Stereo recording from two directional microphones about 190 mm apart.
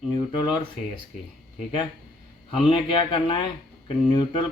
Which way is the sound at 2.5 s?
30° left (ahead or behind).